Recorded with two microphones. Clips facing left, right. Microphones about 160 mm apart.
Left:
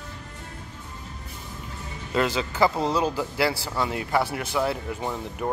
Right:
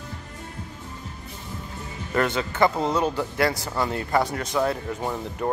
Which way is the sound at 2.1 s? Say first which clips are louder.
Right 1 dB; 15° left (ahead or behind).